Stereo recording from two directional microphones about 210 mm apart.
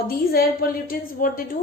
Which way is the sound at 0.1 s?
45° left (ahead or behind).